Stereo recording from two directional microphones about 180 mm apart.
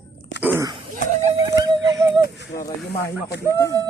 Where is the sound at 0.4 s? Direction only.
15° right (ahead or behind).